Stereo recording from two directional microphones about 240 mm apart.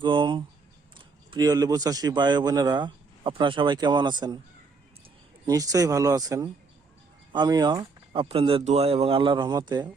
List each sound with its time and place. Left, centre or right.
0.0 s a sound: centre
0.9 s speech: centre
5.5 s speech: centre